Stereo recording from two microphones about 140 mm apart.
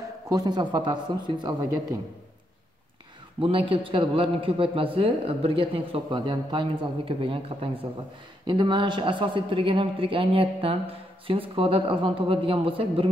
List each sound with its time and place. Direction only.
0.3 s a man's voice: 30° right (ahead or behind)
3.3 s a man's voice: 40° right (ahead or behind)